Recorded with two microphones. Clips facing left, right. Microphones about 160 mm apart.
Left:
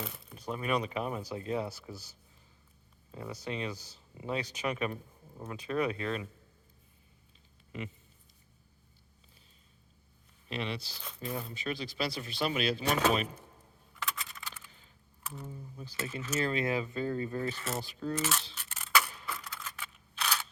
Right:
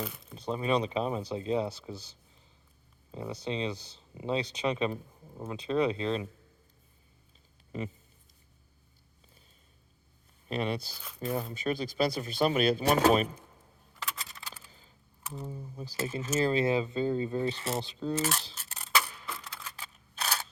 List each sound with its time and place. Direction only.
0.0 s a sound: centre (ahead or behind)
0.3 s speech: 30° right (ahead or behind)
10.5 s speech: 45° right (ahead or behind)
11.0 s speech: 5° right (ahead or behind)
11.3 s speech: 45° right (ahead or behind)
13.0 s speech: 35° right (ahead or behind)
14.2 s a sound: 35° right (ahead or behind)
15.3 s speech: 30° right (ahead or behind)
18.2 s scissors: 40° right (ahead or behind)
19.5 s camera: 30° right (ahead or behind)